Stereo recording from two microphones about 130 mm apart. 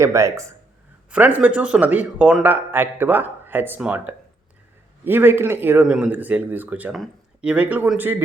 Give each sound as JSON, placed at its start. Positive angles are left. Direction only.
{"t": 0.0, "sound": "speech", "side_deg": -25}
{"t": 1.1, "sound": "speech", "side_deg": -10}
{"t": 6.9, "sound": "speech", "side_deg": 0}
{"t": 7.5, "sound": "speech", "side_deg": -10}